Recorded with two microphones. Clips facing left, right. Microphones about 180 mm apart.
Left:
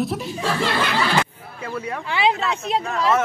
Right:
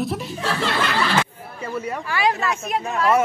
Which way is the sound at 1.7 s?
5° right (ahead or behind).